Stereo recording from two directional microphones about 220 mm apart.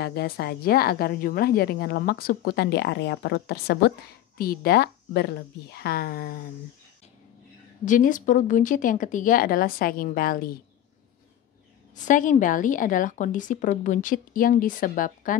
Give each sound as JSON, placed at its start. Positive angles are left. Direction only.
{"t": 0.0, "sound": "a woman's voice", "side_deg": 45}
{"t": 7.8, "sound": "a woman's voice", "side_deg": 35}
{"t": 11.9, "sound": "a woman's voice", "side_deg": 35}